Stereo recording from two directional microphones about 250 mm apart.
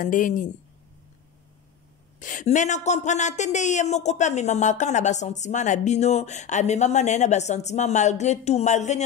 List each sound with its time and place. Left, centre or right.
0.0 s speech: left
2.1 s speech: left